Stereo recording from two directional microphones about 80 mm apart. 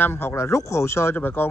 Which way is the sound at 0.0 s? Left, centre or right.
Left.